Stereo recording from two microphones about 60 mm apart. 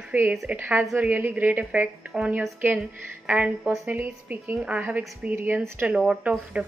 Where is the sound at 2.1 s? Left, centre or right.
Centre.